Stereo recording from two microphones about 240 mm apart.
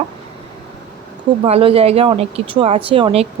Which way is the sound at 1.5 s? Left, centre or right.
Right.